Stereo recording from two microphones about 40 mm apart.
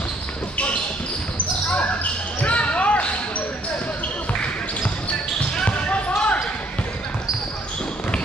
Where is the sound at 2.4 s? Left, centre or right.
Left.